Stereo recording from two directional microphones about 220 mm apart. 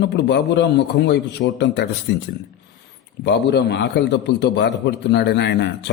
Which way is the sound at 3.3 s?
50° left (ahead or behind).